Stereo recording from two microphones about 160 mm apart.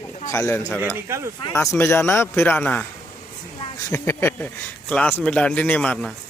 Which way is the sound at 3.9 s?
15° left (ahead or behind).